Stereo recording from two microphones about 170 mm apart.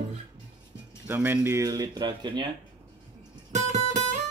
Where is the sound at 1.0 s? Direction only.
10° right (ahead or behind).